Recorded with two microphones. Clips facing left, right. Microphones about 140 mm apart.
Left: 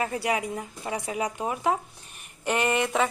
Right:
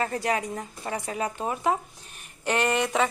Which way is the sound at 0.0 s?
10° left (ahead or behind).